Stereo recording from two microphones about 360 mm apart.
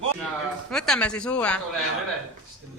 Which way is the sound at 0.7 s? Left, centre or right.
Centre.